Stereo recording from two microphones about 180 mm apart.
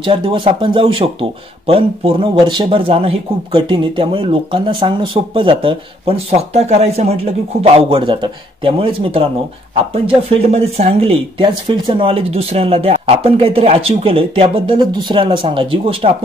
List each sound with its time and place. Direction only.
0.0 s speech: 30° right (ahead or behind)
10.5 s speech: 35° right (ahead or behind)